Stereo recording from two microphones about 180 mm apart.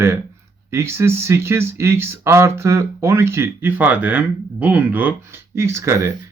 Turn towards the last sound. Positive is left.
turn(degrees=-15)  # may be behind; listen again after turning